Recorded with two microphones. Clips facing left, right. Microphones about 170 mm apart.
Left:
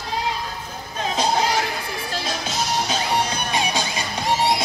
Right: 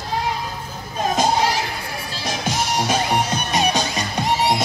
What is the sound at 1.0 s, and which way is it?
Music, 45° right (ahead or behind).